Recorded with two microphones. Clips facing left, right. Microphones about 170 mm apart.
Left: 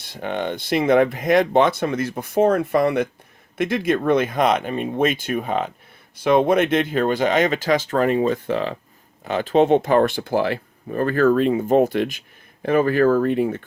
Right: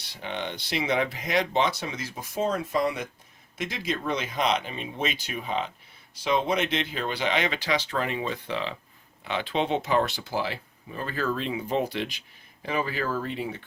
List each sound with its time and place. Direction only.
0.0 s speech: 50° left (ahead or behind)